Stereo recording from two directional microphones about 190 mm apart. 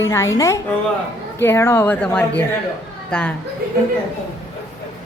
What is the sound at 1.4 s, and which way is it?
A woman's voice, 15° left (ahead or behind).